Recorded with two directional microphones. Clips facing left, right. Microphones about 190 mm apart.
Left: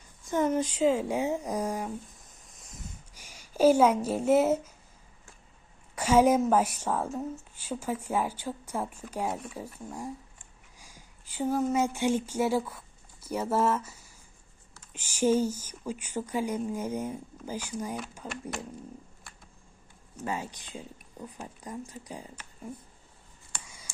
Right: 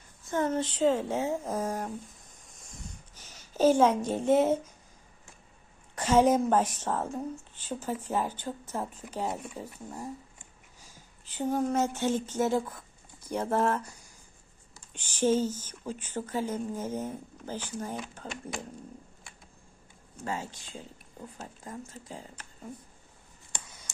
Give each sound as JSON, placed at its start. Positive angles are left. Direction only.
{"t": 0.3, "sound": "a woman's voice", "side_deg": 15}
{"t": 2.4, "sound": "a sound", "side_deg": 0}
{"t": 3.2, "sound": "speech", "side_deg": 10}
{"t": 5.9, "sound": "a woman's voice", "side_deg": 10}
{"t": 20.2, "sound": "a woman's voice", "side_deg": 15}